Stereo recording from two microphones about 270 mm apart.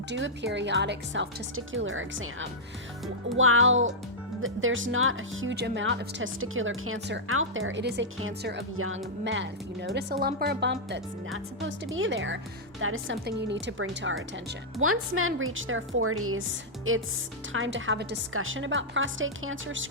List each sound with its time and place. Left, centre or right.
0.1 s speech: right